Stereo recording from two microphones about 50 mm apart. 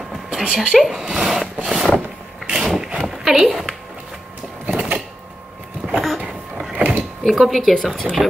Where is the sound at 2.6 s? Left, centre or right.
Centre.